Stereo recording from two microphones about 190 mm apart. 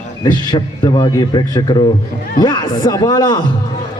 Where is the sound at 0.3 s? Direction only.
25° left (ahead or behind).